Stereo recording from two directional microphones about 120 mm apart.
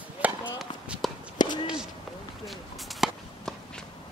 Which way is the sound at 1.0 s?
Centre (ahead or behind).